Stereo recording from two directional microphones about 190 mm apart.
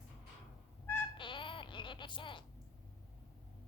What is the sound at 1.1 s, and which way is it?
Music, 25° left (ahead or behind).